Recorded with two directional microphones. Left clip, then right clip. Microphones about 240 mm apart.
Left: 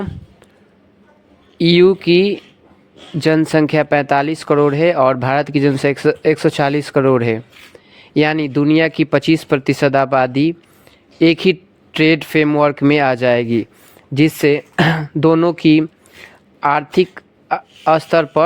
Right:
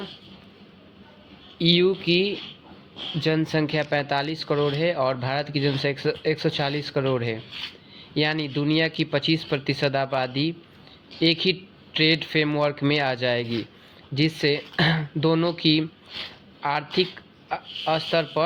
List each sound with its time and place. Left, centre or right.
1.5 s speech: left